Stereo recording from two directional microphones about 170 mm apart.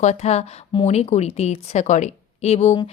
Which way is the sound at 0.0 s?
40° left (ahead or behind).